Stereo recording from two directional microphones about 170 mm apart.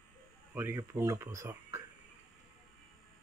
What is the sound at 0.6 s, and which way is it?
Speech, 10° right (ahead or behind).